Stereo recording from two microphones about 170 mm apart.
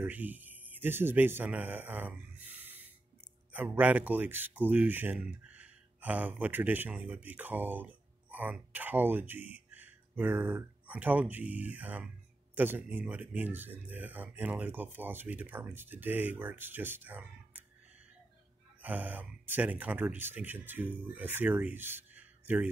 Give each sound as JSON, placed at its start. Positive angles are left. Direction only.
{"t": 0.0, "sound": "a man's voice", "side_deg": -10}
{"t": 18.8, "sound": "speech", "side_deg": -10}